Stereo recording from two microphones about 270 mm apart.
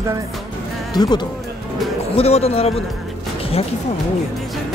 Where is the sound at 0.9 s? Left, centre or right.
Centre.